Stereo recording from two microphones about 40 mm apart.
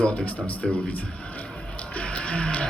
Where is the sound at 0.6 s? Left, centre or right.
Centre.